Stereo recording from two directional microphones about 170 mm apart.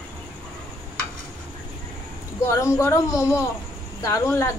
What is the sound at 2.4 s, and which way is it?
A woman's voice, 15° left (ahead or behind).